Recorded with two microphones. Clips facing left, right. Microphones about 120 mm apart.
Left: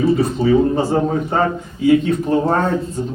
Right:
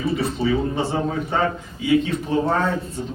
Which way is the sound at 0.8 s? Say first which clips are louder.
Left 6 dB; 40° left (ahead or behind).